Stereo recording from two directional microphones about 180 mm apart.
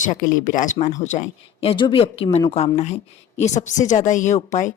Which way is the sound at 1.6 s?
30° left (ahead or behind).